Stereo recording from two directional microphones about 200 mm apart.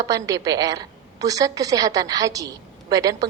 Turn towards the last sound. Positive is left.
turn(degrees=-15)  # may be behind; listen again after turning